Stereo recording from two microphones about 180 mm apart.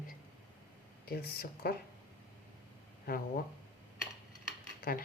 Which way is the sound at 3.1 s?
55° left (ahead or behind).